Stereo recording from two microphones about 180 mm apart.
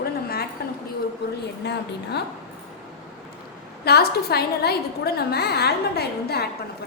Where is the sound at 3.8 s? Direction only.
60° left (ahead or behind).